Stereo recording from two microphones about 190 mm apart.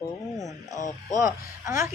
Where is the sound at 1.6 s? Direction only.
15° right (ahead or behind).